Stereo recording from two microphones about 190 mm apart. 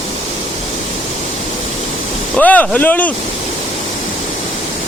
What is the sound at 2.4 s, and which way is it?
Speech, 10° left (ahead or behind).